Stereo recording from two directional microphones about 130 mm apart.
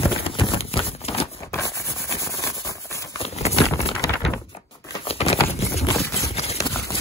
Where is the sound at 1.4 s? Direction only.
20° left (ahead or behind).